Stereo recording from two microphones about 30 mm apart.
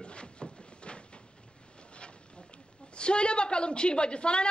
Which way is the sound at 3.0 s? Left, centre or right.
Left.